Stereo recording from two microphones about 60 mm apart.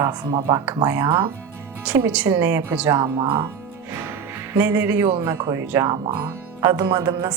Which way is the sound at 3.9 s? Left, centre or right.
Right.